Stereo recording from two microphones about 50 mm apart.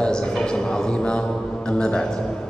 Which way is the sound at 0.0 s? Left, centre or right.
Centre.